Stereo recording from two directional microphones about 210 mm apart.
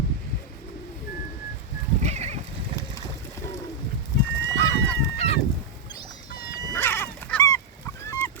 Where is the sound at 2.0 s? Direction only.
30° right (ahead or behind).